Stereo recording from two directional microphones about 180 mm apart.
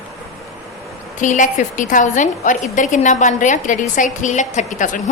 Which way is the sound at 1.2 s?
45° left (ahead or behind).